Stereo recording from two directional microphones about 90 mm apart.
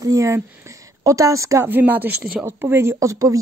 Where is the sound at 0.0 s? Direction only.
35° right (ahead or behind).